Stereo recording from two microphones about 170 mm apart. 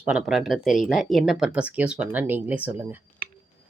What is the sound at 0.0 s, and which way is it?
Speech, 5° right (ahead or behind).